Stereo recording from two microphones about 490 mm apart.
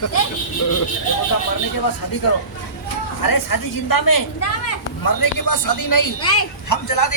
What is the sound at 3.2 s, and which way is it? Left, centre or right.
A woman's voice, left.